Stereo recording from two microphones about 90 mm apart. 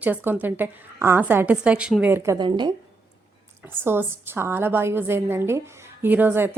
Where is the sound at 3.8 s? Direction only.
25° right (ahead or behind).